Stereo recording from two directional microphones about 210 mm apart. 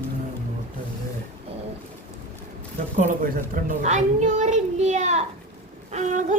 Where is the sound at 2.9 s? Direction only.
40° right (ahead or behind).